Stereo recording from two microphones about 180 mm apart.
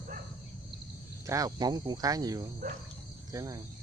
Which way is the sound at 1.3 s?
20° right (ahead or behind).